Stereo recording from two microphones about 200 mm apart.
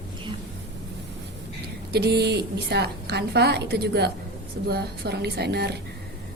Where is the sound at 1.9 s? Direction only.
55° right (ahead or behind).